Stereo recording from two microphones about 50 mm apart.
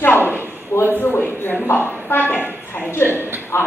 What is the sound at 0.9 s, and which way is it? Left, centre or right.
Speech, left.